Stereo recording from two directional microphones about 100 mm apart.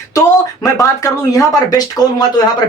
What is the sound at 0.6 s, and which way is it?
Speech, 35° left (ahead or behind).